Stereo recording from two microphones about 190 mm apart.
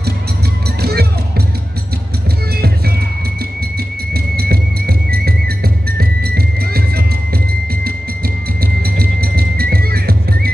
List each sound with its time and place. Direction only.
0.8 s music: 55° right (ahead or behind)
4.1 s music: 55° right (ahead or behind)
8.9 s music: 50° right (ahead or behind)